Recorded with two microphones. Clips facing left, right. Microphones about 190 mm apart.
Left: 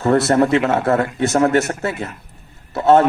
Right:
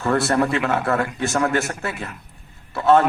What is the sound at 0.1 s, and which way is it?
Speech, 20° left (ahead or behind).